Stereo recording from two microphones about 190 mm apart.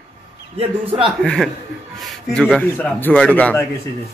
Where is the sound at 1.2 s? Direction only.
Centre (ahead or behind).